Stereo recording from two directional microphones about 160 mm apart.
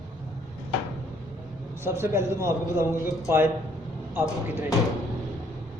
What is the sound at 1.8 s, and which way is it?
A man's voice, 15° right (ahead or behind).